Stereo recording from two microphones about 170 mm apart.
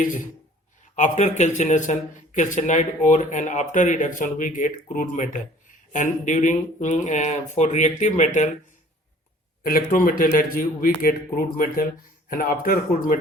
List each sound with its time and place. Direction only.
0.9 s speech: 45° left (ahead or behind)
9.6 s a man's voice: 55° left (ahead or behind)